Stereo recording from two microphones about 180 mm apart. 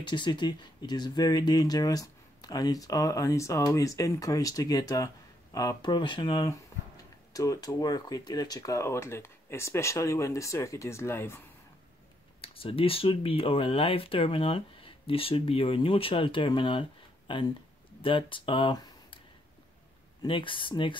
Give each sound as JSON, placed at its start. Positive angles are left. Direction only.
{"t": 0.0, "sound": "speech", "side_deg": 25}
{"t": 12.4, "sound": "speech", "side_deg": 30}
{"t": 20.2, "sound": "speech", "side_deg": 30}